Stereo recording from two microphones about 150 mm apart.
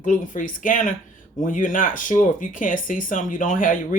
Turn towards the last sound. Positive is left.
turn(degrees=65)  # may be behind; listen again after turning